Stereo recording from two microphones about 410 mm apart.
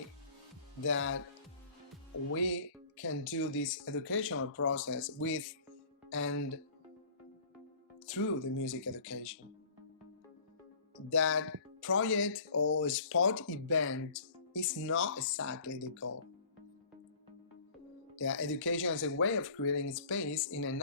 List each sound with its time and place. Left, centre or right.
0.9 s speech: left
2.3 s speech: left
8.0 s speech: left
11.1 s speech: left
18.2 s speech: left